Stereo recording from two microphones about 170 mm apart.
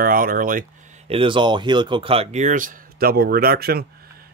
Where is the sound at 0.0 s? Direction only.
55° right (ahead or behind).